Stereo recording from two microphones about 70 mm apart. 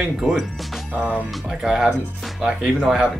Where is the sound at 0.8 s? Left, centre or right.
Right.